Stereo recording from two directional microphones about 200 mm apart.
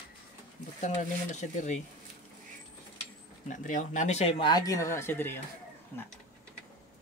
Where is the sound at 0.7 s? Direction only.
35° left (ahead or behind).